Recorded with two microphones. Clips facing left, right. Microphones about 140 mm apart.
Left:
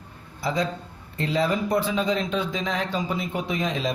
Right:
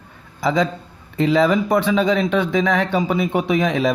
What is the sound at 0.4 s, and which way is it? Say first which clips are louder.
A man's voice: right 7 dB; 90° right.